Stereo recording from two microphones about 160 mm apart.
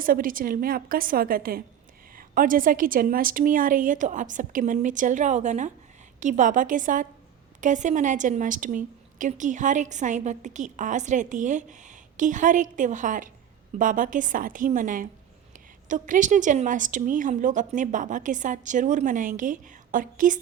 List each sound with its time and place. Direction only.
0.0 s a woman's voice: 60° right (ahead or behind)